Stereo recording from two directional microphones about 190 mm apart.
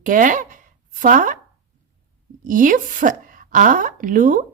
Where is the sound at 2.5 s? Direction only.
45° right (ahead or behind).